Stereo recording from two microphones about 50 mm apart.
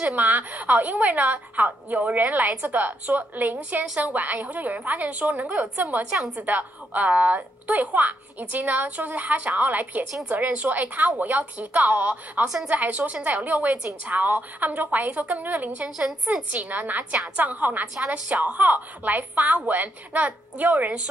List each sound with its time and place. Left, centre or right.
0.0 s a child's voice: right